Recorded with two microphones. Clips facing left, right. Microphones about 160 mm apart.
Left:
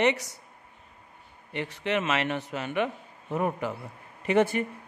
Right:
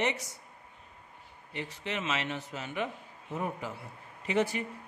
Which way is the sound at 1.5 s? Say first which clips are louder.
Left 8 dB; 65° left (ahead or behind).